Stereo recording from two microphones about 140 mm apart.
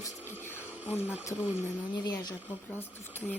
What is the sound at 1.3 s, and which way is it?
Speech, 20° left (ahead or behind).